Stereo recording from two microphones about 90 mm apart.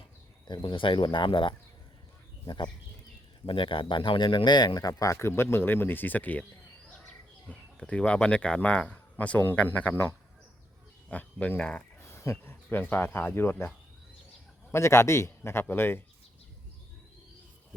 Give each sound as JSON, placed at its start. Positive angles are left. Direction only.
{"t": 0.4, "sound": "speech", "side_deg": 55}
{"t": 3.4, "sound": "speech", "side_deg": 75}
{"t": 5.1, "sound": "speech", "side_deg": 30}
{"t": 7.4, "sound": "speech", "side_deg": 15}
{"t": 11.1, "sound": "speech", "side_deg": 15}
{"t": 11.9, "sound": "a sound", "side_deg": 30}
{"t": 12.9, "sound": "speech", "side_deg": 20}
{"t": 14.7, "sound": "speech", "side_deg": 30}